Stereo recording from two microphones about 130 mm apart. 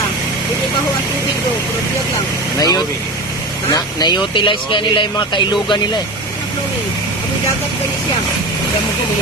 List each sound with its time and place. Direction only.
2.6 s speech: 30° left (ahead or behind)